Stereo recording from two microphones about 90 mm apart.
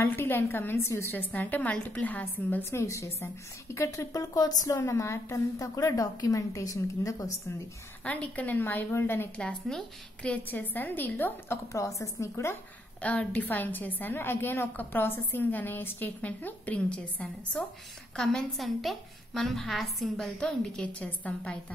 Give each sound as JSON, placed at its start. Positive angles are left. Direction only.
{"t": 0.0, "sound": "a woman's voice", "side_deg": 25}
{"t": 2.8, "sound": "a woman's voice", "side_deg": 30}
{"t": 4.7, "sound": "a woman's voice", "side_deg": 30}
{"t": 8.0, "sound": "a woman's voice", "side_deg": 15}
{"t": 9.4, "sound": "a woman's voice", "side_deg": 10}
{"t": 13.0, "sound": "a woman's voice", "side_deg": 15}